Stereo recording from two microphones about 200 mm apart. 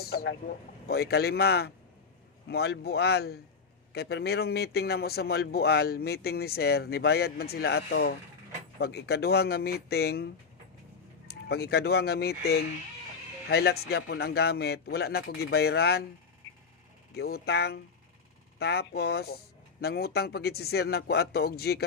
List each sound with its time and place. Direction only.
0.0 s a man's voice: 50° left (ahead or behind)
17.2 s a man's voice: 50° left (ahead or behind)